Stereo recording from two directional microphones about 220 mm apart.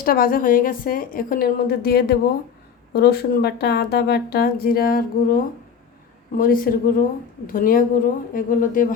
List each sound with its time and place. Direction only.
0.0 s a woman's voice: 40° left (ahead or behind)